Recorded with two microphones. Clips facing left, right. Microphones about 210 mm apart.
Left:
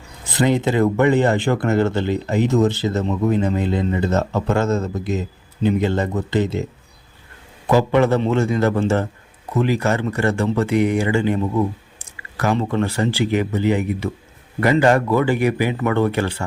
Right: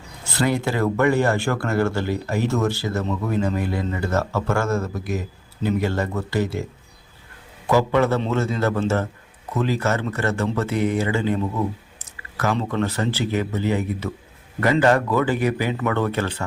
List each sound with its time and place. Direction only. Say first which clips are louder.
0.3 s speech: left 4 dB; 20° left (ahead or behind)
7.7 s a man's voice: left 3 dB; 15° left (ahead or behind)